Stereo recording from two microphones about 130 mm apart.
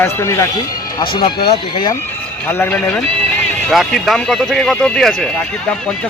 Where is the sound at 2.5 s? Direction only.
10° left (ahead or behind).